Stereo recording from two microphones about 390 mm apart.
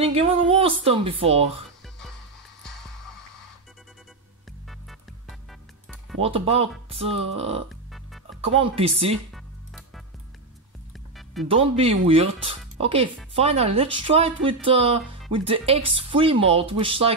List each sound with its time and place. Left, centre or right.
0.0 s speech: centre
5.5 s music: centre
6.2 s speech: centre
7.9 s music: centre
8.5 s speech: centre
9.3 s music: centre
11.4 s speech: centre